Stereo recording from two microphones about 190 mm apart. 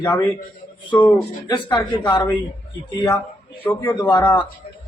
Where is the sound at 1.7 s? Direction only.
15° left (ahead or behind).